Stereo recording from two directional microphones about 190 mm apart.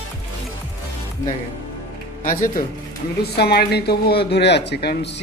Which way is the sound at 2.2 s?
45° left (ahead or behind).